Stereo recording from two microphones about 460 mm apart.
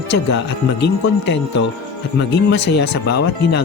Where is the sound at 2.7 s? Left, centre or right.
Left.